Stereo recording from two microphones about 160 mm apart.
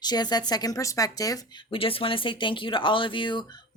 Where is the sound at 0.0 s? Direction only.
25° left (ahead or behind).